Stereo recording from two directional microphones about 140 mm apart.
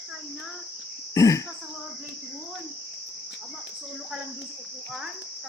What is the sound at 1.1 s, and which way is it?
Speech, 25° left (ahead or behind).